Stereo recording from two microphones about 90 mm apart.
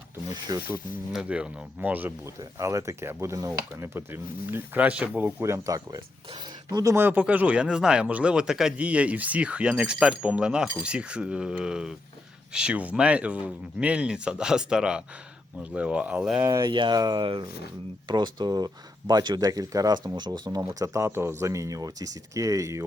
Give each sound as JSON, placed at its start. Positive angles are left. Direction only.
{"t": 0.5, "sound": "speech", "side_deg": -45}
{"t": 1.1, "sound": "speech", "side_deg": -10}
{"t": 2.4, "sound": "speech", "side_deg": -35}
{"t": 5.4, "sound": "speech", "side_deg": -35}
{"t": 6.9, "sound": "speech", "side_deg": -20}
{"t": 16.4, "sound": "speech", "side_deg": -35}
{"t": 16.6, "sound": "speech", "side_deg": -60}
{"t": 20.7, "sound": "speech", "side_deg": -40}